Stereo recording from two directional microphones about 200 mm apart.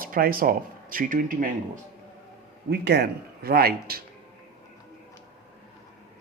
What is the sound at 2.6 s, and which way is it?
Speech, 55° right (ahead or behind).